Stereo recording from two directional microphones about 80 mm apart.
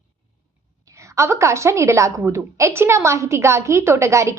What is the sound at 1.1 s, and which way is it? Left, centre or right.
A woman's voice, right.